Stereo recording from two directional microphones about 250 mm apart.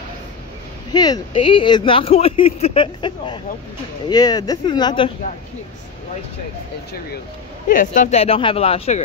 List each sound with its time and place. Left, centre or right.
0.9 s speech: centre
7.6 s speech: left